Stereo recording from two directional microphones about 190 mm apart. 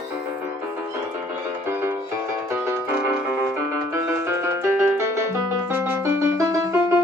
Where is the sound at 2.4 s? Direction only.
15° right (ahead or behind).